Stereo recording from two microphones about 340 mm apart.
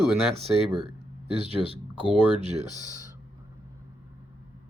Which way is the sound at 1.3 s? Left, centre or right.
Centre.